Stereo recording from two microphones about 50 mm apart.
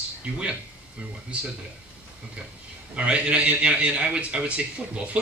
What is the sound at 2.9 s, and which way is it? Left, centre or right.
A man's voice, right.